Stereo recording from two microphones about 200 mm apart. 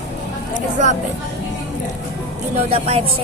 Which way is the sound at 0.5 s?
40° right (ahead or behind).